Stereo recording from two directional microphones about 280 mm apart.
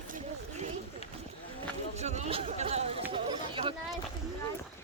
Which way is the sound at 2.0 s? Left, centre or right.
Right.